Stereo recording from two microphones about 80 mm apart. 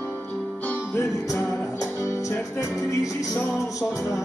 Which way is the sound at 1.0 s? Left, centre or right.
Left.